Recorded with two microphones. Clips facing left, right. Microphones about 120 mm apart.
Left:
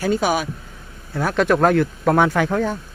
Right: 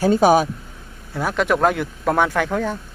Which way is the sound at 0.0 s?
35° right (ahead or behind).